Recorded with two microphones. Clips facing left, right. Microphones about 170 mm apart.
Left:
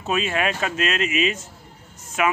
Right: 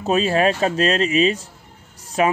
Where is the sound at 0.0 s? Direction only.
35° right (ahead or behind).